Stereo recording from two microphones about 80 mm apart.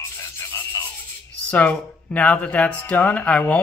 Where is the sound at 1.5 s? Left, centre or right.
Left.